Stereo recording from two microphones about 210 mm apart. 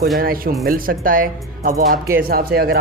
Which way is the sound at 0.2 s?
45° right (ahead or behind).